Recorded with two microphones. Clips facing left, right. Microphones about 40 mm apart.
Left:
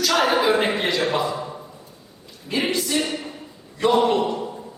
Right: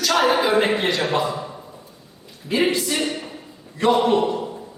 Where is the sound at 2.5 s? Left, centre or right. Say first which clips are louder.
Right 3 dB; centre.